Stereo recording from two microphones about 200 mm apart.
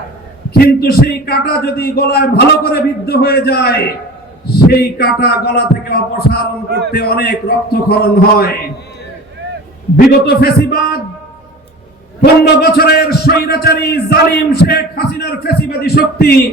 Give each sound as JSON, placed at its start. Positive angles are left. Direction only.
{"t": 0.5, "sound": "a man's voice", "side_deg": 50}
{"t": 10.1, "sound": "a man's voice", "side_deg": 50}
{"t": 12.2, "sound": "a man's voice", "side_deg": 55}